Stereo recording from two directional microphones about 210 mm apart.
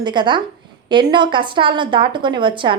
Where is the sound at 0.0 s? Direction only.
20° right (ahead or behind).